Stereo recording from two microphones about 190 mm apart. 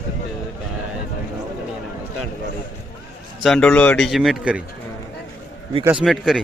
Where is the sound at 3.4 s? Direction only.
5° left (ahead or behind).